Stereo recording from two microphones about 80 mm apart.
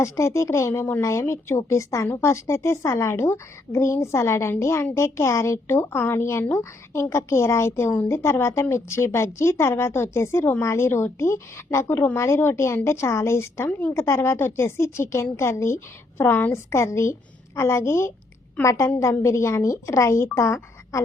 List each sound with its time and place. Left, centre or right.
0.0 s a woman's voice: left
13.7 s a woman's voice: left
13.9 s a woman's voice: left